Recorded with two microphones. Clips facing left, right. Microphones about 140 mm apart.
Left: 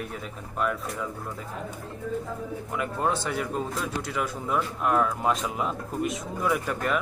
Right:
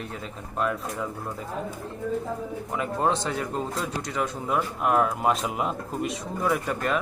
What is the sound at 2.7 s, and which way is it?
Speech, 25° right (ahead or behind).